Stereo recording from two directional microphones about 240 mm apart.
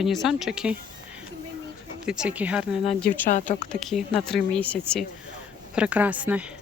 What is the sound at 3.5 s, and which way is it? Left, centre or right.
Speech, left.